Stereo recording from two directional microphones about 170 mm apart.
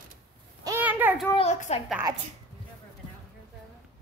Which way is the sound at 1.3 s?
40° left (ahead or behind).